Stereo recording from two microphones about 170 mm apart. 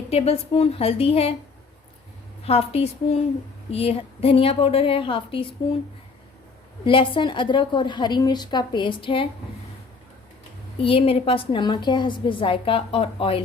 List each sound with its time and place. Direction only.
0.1 s a woman's voice: 35° left (ahead or behind)
2.4 s a woman's voice: 35° left (ahead or behind)
6.8 s a woman's voice: 30° left (ahead or behind)
10.8 s a woman's voice: 35° left (ahead or behind)